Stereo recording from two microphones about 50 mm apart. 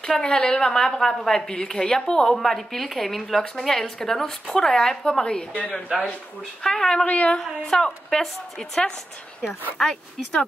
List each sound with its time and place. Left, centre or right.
0.0 s a woman's voice: centre
5.5 s speech: left
6.6 s a woman's voice: centre
7.1 s speech: left
7.6 s a woman's voice: centre